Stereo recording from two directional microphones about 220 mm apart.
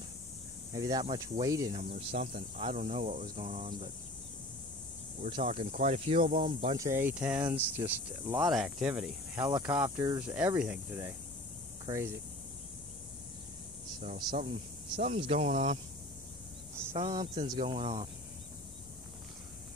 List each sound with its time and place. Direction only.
0.7 s speech: 15° right (ahead or behind)
1.8 s speech: 25° right (ahead or behind)
5.2 s speech: 25° right (ahead or behind)
10.2 s speech: 5° right (ahead or behind)
13.9 s speech: 40° right (ahead or behind)
17.5 s speech: 20° right (ahead or behind)